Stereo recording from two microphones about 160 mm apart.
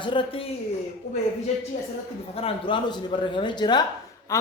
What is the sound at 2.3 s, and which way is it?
Speech, 35° left (ahead or behind).